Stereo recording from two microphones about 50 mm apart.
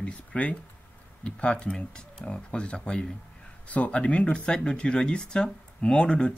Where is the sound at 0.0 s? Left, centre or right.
Left.